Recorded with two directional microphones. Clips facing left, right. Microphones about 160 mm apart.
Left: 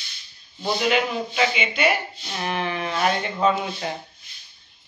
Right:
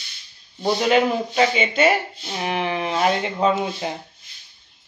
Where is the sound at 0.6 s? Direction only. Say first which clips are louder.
Right 4 dB; 35° right (ahead or behind).